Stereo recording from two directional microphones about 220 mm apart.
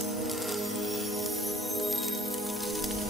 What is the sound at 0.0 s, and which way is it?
Music, centre (ahead or behind).